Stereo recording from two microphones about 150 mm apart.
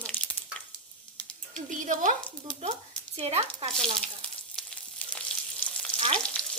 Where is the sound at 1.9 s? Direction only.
60° right (ahead or behind).